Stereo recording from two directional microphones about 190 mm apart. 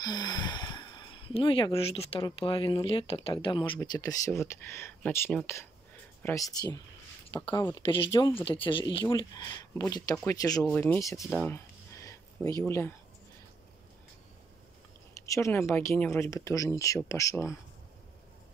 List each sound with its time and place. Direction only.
0.0 s speech: 20° left (ahead or behind)
10.6 s speech: 10° left (ahead or behind)
11.2 s a sound: 10° left (ahead or behind)
15.2 s speech: 15° left (ahead or behind)